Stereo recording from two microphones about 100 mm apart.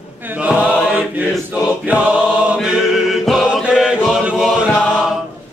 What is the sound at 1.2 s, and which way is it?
Choir, 15° right (ahead or behind).